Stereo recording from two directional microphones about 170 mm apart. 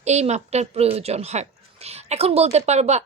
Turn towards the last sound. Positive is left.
turn(degrees=-40)  # may be behind; listen again after turning